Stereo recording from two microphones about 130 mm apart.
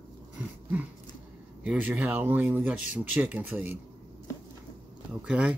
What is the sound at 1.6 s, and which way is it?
Speech, 10° right (ahead or behind).